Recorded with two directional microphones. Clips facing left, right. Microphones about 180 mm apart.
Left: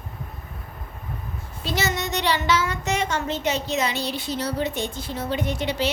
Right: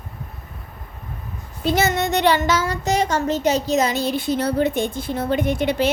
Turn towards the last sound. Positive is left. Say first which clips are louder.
# right 5 dB
turn(degrees=-50)  # may be behind; listen again after turning